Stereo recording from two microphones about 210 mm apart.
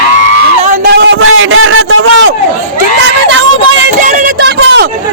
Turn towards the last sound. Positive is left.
turn(degrees=-55)  # may be behind; listen again after turning